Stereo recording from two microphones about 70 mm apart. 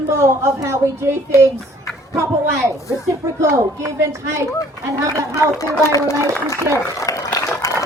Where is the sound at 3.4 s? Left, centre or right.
Right.